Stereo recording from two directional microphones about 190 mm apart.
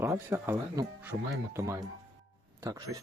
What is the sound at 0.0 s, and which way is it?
Speech, 15° right (ahead or behind).